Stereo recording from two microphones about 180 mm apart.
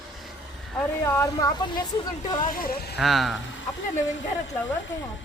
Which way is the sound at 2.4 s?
50° left (ahead or behind).